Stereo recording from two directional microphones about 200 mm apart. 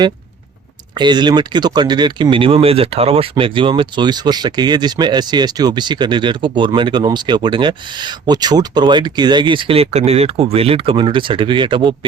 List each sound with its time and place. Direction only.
0.9 s speech: 20° right (ahead or behind)